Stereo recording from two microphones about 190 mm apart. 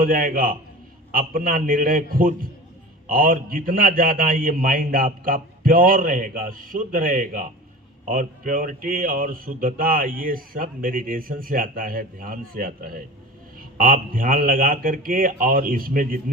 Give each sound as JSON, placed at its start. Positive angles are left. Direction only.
{"t": 0.0, "sound": "speech", "side_deg": -45}